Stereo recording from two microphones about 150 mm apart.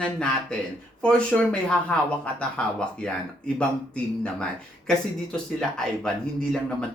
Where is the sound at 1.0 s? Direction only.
5° left (ahead or behind).